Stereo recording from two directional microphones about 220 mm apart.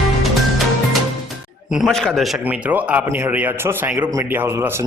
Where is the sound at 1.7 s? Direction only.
Centre (ahead or behind).